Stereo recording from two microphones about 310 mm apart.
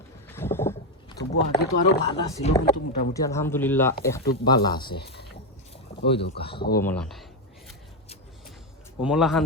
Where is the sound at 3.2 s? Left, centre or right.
Centre.